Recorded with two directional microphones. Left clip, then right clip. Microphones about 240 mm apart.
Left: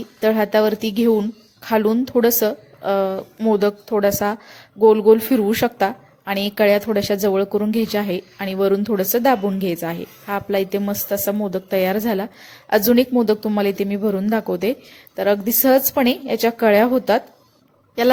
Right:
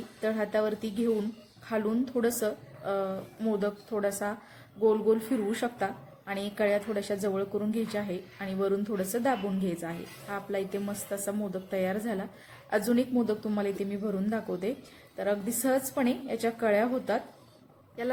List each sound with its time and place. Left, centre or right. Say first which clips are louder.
0.2 s a woman's voice: left 12 dB; left